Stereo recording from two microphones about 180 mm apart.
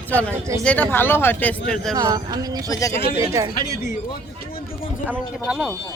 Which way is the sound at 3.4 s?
15° right (ahead or behind).